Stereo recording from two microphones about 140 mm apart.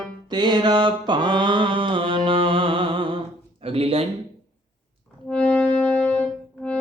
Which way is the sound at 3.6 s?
45° right (ahead or behind).